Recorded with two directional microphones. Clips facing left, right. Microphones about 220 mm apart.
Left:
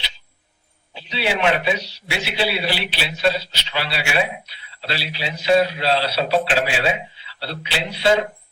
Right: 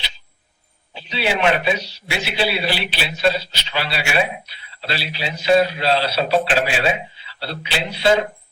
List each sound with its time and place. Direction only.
0.9 s a man's voice: 45° right (ahead or behind)